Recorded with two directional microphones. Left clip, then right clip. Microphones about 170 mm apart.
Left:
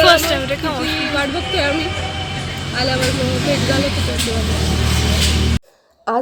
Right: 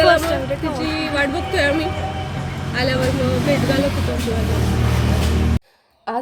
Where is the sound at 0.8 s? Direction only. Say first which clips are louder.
Right 1 dB; 15° right (ahead or behind).